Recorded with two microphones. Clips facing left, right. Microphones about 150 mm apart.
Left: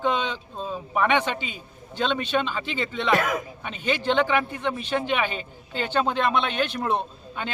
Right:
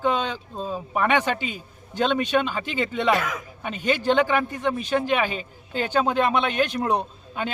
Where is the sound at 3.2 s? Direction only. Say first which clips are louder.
Left 4 dB; 65° left (ahead or behind).